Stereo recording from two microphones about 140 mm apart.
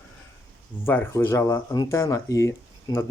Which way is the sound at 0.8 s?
15° left (ahead or behind).